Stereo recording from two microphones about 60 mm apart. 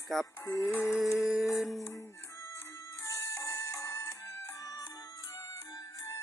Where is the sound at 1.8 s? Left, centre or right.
Left.